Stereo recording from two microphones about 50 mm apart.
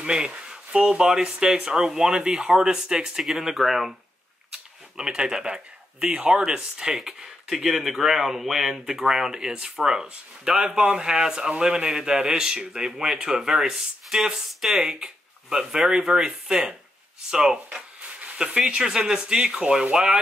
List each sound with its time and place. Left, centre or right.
0.0 s speech: centre
4.9 s speech: centre
17.3 s a sound: right
18.8 s speech: centre